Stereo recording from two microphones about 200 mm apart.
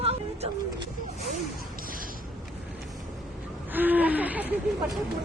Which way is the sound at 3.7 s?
10° right (ahead or behind).